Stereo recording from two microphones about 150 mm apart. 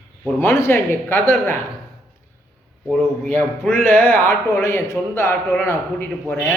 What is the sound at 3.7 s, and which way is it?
Speech, 15° left (ahead or behind).